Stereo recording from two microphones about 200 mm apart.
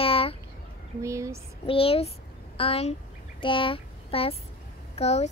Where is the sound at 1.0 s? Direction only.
15° right (ahead or behind).